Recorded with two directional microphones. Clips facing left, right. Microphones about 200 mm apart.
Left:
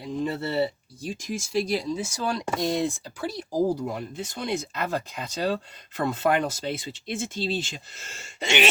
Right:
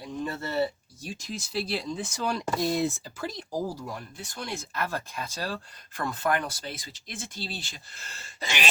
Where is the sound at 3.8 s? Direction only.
25° left (ahead or behind).